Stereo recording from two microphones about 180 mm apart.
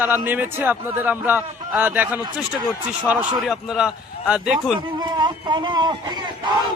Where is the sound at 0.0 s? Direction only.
10° right (ahead or behind).